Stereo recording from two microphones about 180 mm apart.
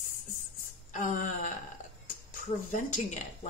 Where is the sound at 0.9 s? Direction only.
45° left (ahead or behind).